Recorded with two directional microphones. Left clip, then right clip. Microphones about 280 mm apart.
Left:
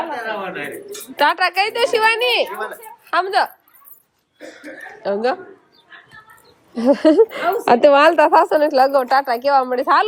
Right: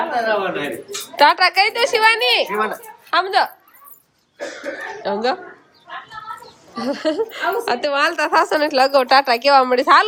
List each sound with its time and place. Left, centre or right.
0.3 s a woman's voice: centre
5.0 s a woman's voice: centre
6.7 s a woman's voice: centre